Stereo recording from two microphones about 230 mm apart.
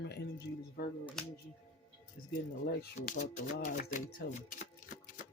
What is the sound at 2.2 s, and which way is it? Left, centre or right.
Speech, left.